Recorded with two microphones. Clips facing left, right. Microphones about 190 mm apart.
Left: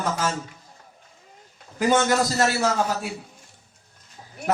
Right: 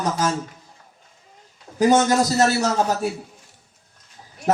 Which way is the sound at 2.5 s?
40° right (ahead or behind).